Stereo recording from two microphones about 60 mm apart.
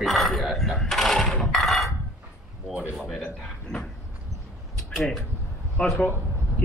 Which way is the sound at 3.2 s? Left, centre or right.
Centre.